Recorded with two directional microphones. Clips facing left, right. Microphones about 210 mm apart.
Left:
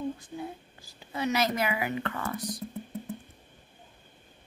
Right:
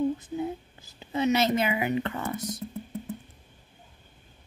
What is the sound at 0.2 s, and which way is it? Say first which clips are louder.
A woman's voice: right 7 dB; 20° right (ahead or behind).